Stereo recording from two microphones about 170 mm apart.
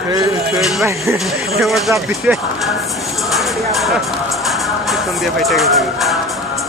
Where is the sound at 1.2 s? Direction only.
Centre (ahead or behind).